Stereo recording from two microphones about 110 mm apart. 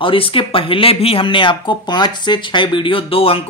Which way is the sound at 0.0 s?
55° left (ahead or behind).